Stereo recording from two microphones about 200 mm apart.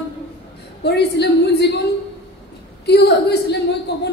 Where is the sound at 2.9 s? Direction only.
55° left (ahead or behind).